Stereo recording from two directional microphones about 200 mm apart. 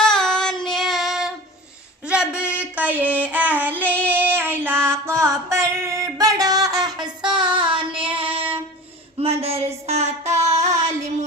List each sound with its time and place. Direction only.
0.0 s child singing: 5° left (ahead or behind)
2.7 s child singing: 10° right (ahead or behind)
4.6 s music: 10° right (ahead or behind)
9.1 s a sound: 30° right (ahead or behind)
10.5 s female singing: 35° right (ahead or behind)